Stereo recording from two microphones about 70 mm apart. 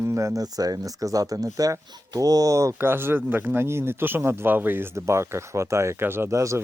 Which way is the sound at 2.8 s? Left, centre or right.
Right.